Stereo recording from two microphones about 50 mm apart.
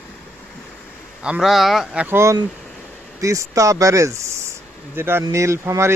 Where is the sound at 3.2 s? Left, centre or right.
Right.